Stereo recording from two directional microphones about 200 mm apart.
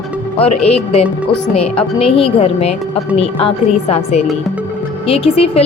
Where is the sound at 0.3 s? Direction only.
30° left (ahead or behind).